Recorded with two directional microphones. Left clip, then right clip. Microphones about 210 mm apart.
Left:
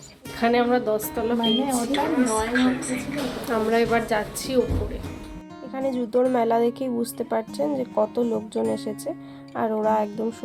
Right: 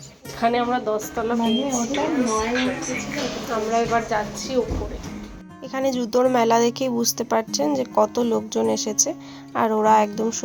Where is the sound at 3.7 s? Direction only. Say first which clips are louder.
Right 1 dB; 30° left (ahead or behind).